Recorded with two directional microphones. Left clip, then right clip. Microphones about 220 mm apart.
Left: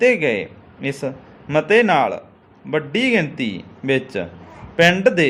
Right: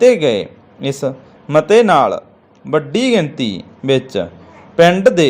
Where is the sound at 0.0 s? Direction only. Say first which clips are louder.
Right 5 dB; 25° right (ahead or behind).